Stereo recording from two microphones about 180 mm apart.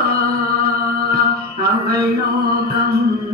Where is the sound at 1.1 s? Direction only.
60° right (ahead or behind).